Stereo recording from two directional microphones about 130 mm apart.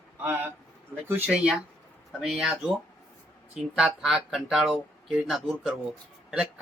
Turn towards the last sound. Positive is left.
turn(degrees=-5)  # may be behind; listen again after turning